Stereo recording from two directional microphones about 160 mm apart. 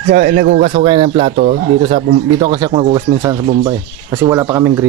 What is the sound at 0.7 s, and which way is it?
Speech, 35° right (ahead or behind).